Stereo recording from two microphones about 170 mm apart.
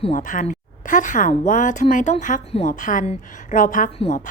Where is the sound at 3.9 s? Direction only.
40° left (ahead or behind).